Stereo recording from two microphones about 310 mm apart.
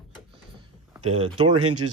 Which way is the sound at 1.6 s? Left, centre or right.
Right.